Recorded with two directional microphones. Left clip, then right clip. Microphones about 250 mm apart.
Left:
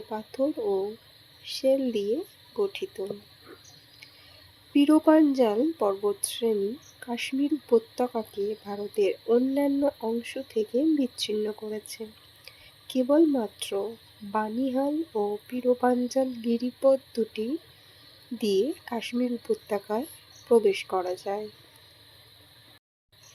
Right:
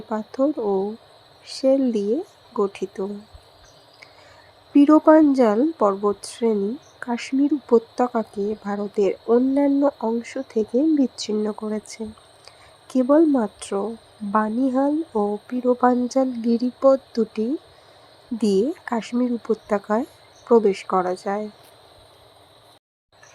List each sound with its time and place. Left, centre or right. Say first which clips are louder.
0.1 s speech: right 6 dB; centre
4.7 s speech: right 7 dB; centre